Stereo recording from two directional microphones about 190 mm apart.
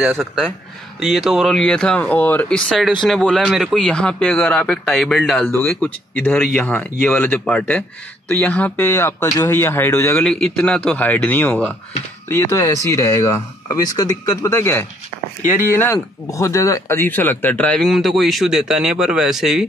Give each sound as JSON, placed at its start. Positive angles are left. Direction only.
{"t": 1.0, "sound": "speech", "side_deg": 0}